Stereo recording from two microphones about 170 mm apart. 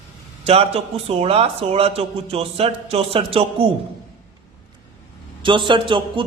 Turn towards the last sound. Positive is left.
turn(degrees=-30)  # may be behind; listen again after turning